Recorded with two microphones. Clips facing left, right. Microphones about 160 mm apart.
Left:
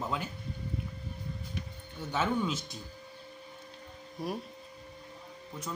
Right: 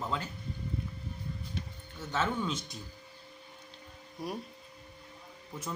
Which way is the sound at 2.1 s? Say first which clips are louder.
Left 2 dB; 10° left (ahead or behind).